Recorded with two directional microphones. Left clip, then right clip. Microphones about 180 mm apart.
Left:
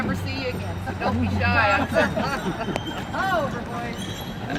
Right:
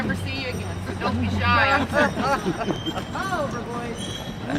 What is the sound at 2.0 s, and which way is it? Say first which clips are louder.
Speech: right 2 dB; 50° right (ahead or behind).